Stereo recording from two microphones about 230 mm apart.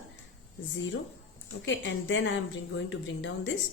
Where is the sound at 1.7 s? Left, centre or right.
Left.